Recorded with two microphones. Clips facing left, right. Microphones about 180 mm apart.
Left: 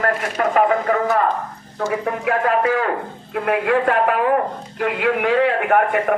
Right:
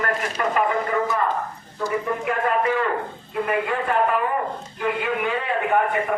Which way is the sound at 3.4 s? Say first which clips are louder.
Left 6 dB; 80° left.